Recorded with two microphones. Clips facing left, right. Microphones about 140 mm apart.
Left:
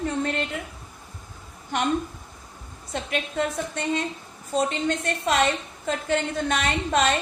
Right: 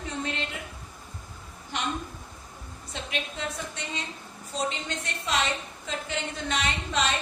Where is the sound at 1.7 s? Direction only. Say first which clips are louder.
Left 7 dB; 50° left (ahead or behind).